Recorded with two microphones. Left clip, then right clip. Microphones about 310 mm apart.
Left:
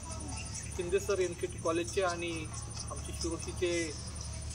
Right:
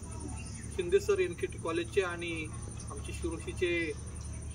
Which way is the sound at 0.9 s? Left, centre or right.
Centre.